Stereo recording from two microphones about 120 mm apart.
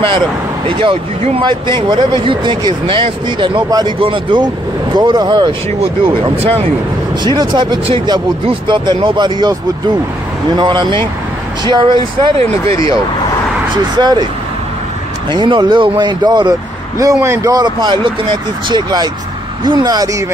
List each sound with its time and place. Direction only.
0.7 s speech: 45° right (ahead or behind)
6.0 s speech: 45° right (ahead or behind)
10.6 s speech: 40° right (ahead or behind)
13.9 s speech: 35° right (ahead or behind)
15.3 s speech: 40° right (ahead or behind)
17.0 s a man's voice: 25° right (ahead or behind)